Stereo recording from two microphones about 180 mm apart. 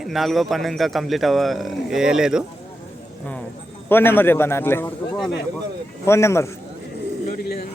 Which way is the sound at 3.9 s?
10° left (ahead or behind).